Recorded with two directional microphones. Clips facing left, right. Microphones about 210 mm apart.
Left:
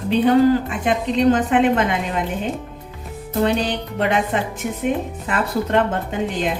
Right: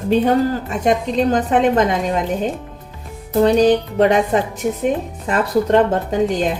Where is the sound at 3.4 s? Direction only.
40° right (ahead or behind).